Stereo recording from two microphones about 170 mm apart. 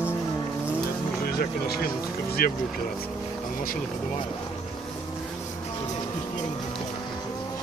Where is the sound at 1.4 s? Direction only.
65° left (ahead or behind).